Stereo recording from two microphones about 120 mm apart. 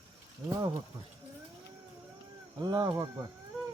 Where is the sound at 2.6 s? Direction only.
40° right (ahead or behind).